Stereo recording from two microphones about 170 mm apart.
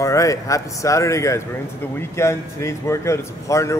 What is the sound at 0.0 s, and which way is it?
Speech, 20° left (ahead or behind).